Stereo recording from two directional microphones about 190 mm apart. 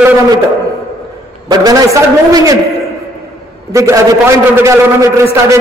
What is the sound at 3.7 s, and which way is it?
A man's voice, 15° right (ahead or behind).